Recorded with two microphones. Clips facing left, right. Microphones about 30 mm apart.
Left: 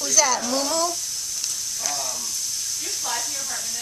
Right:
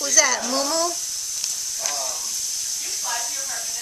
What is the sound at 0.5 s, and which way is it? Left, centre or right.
Speech, centre.